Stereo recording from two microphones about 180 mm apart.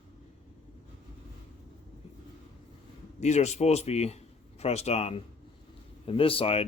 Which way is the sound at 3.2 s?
40° left (ahead or behind).